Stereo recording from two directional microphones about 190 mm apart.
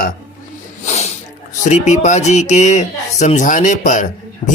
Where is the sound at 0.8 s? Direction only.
35° left (ahead or behind).